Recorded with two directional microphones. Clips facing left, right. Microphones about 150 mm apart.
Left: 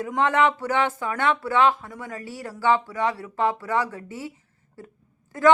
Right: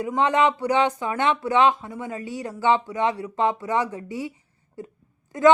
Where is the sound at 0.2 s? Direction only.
15° right (ahead or behind).